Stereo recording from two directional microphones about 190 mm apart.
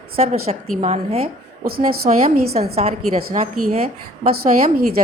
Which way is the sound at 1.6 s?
50° right (ahead or behind).